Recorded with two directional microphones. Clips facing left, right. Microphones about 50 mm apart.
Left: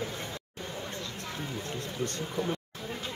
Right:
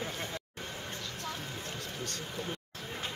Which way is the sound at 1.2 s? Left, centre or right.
Left.